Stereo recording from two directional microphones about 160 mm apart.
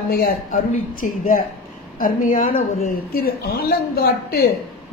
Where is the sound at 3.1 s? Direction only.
70° left (ahead or behind).